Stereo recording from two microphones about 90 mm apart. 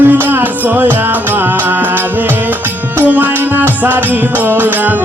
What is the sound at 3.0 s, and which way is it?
Music, 20° right (ahead or behind).